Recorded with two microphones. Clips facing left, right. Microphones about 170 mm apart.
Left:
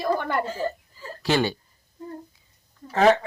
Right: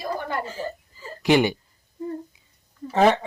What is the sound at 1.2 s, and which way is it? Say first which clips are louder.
Speech: right 4 dB; 15° right (ahead or behind).